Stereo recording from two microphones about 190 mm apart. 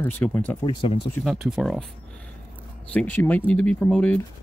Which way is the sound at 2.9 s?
10° left (ahead or behind).